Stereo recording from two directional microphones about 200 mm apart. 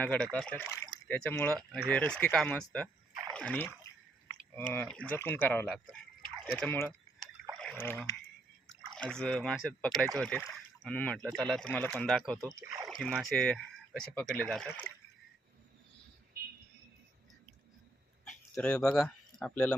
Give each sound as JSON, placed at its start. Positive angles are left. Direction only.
{"t": 0.0, "sound": "speech", "side_deg": 5}
{"t": 5.6, "sound": "speech", "side_deg": -5}
{"t": 12.5, "sound": "speech", "side_deg": -15}
{"t": 12.9, "sound": "speech", "side_deg": 0}
{"t": 18.3, "sound": "speech", "side_deg": 5}